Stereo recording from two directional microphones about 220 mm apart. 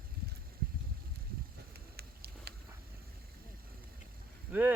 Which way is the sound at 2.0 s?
45° right (ahead or behind).